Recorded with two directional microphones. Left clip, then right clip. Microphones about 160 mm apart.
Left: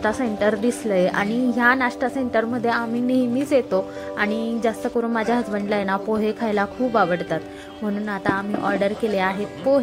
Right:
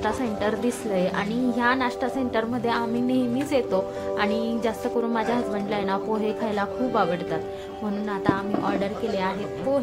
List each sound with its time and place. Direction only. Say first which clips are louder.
0.0 s a woman's voice: left 4 dB; 30° left (ahead or behind)